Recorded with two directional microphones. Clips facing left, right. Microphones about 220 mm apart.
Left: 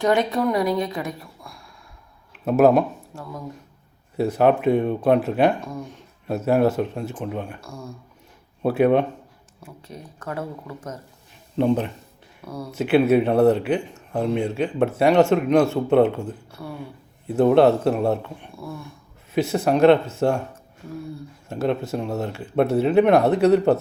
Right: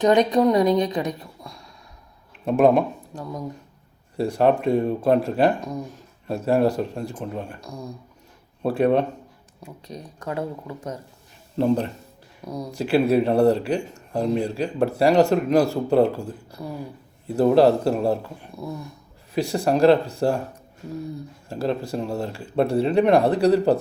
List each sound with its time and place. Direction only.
0.0 s a woman's voice: 20° right (ahead or behind)
2.4 s speech: 5° left (ahead or behind)
3.1 s a woman's voice: 20° right (ahead or behind)
4.2 s speech: 5° left (ahead or behind)
7.6 s speech: 15° right (ahead or behind)
8.6 s speech: 5° left (ahead or behind)
9.6 s speech: 15° right (ahead or behind)
11.5 s speech: centre (ahead or behind)
12.5 s speech: 15° right (ahead or behind)
12.7 s speech: centre (ahead or behind)
18.5 s a woman's voice: 20° right (ahead or behind)
19.3 s speech: centre (ahead or behind)
21.5 s speech: centre (ahead or behind)